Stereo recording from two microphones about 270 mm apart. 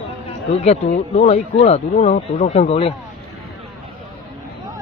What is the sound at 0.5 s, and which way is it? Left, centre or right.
Speech, left.